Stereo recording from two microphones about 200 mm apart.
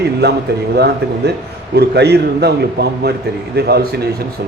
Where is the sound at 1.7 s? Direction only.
55° right (ahead or behind).